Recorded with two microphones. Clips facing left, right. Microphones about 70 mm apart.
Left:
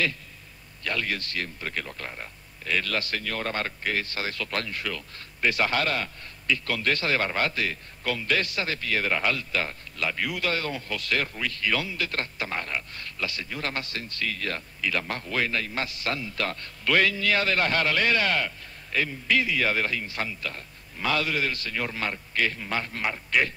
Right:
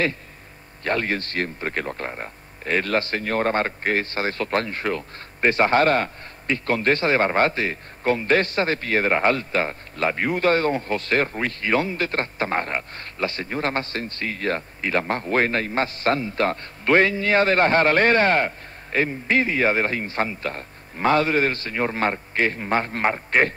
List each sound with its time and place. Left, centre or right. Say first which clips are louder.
0.8 s speech: right 6 dB; right